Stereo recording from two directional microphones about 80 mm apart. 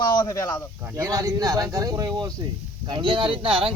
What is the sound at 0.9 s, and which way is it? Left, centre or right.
Speech, right.